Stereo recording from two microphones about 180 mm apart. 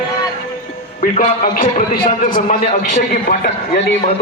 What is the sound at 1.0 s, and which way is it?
A man's voice, 50° left (ahead or behind).